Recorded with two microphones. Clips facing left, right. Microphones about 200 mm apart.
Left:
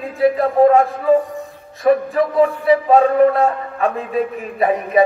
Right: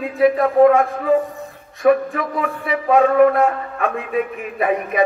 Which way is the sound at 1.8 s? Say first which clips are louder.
Left 1 dB; 35° left (ahead or behind).